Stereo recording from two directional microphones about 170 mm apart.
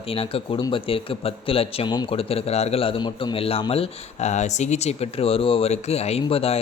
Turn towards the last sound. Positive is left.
turn(degrees=35)  # may be behind; listen again after turning